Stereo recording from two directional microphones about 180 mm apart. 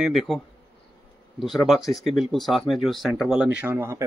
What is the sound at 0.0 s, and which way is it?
Speech, centre (ahead or behind).